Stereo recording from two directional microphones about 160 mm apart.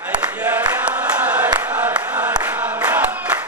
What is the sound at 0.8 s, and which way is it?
Chant, 10° right (ahead or behind).